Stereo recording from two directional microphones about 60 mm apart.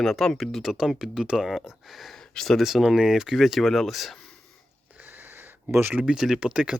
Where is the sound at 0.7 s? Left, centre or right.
Centre.